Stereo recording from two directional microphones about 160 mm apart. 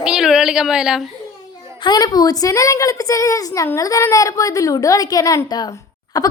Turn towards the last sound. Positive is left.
turn(degrees=25)  # may be behind; listen again after turning